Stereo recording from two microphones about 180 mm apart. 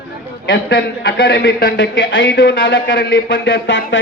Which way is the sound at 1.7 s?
85° left.